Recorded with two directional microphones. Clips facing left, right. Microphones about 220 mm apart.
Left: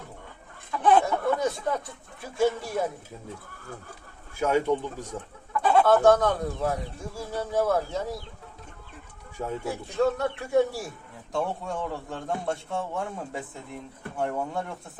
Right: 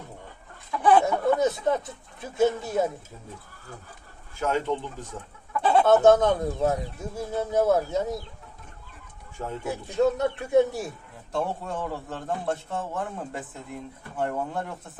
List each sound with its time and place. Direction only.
0.8 s a sound: 10° right (ahead or behind)
1.0 s speech: 25° right (ahead or behind)
4.4 s speech: 10° left (ahead or behind)
5.6 s speech: 20° right (ahead or behind)
9.6 s speech: 20° right (ahead or behind)
11.3 s a man's voice: 5° right (ahead or behind)